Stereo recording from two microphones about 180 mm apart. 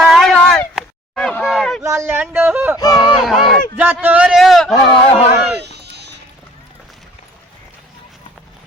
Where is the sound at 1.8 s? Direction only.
15° right (ahead or behind).